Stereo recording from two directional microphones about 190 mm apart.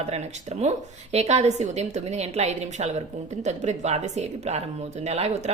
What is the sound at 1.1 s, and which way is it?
Speech, 35° right (ahead or behind).